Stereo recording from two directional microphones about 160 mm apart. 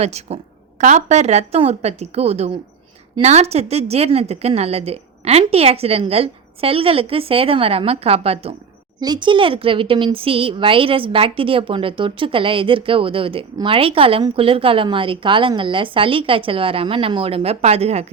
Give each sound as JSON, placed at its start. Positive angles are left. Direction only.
{"t": 0.0, "sound": "a woman's voice", "side_deg": -40}
{"t": 9.0, "sound": "speech", "side_deg": -25}